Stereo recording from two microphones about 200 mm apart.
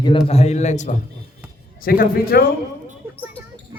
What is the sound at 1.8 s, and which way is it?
Speech, 45° left (ahead or behind).